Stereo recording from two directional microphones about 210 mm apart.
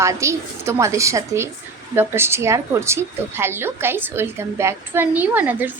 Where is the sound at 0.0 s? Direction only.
15° right (ahead or behind).